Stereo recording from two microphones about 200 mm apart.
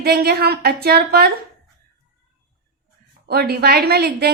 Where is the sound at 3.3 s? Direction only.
50° right (ahead or behind).